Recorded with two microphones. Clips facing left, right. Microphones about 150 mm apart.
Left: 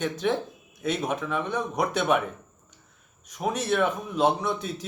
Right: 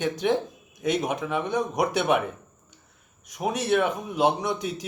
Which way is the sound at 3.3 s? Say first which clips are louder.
Right 2 dB; 10° right (ahead or behind).